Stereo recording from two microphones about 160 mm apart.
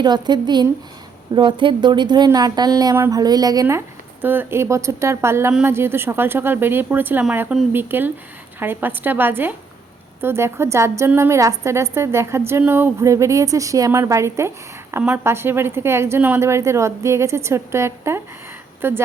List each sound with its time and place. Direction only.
0.0 s a woman's voice: 25° right (ahead or behind)